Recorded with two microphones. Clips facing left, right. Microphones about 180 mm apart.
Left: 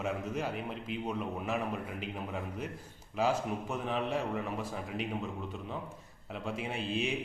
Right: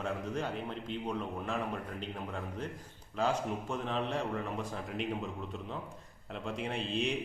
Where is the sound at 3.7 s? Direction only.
5° left (ahead or behind).